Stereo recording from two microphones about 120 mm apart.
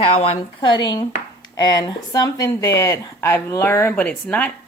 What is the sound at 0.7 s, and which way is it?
A woman's voice, 40° left (ahead or behind).